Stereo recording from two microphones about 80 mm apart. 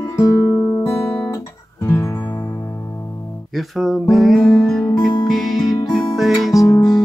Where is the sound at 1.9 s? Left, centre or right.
Left.